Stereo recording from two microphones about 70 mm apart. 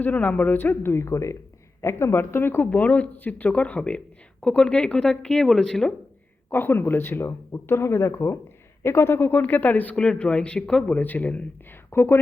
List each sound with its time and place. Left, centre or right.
0.0 s speech: left
2.6 s speech: left
6.5 s speech: left
9.9 s speech: centre
11.9 s speech: left